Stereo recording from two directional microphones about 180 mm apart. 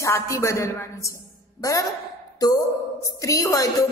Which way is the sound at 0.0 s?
15° left (ahead or behind).